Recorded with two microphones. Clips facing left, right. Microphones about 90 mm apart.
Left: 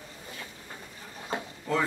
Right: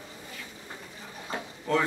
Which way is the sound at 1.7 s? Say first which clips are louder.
Right 2 dB; 5° left (ahead or behind).